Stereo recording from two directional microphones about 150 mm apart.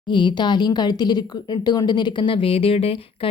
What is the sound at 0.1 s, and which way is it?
Speech, 30° left (ahead or behind).